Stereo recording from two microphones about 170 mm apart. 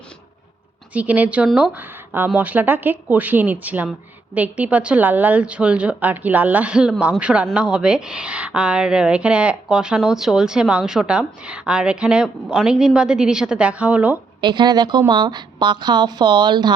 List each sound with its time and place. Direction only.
0.9 s a woman's voice: 10° right (ahead or behind)
14.4 s a woman's voice: 25° right (ahead or behind)